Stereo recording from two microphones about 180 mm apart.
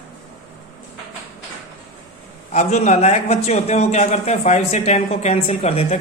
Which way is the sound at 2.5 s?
40° left (ahead or behind).